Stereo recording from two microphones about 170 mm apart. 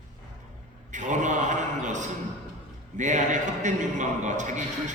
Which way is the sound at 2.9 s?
45° right (ahead or behind).